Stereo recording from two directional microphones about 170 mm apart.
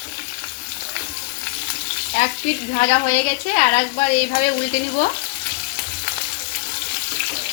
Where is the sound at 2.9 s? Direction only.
45° left (ahead or behind).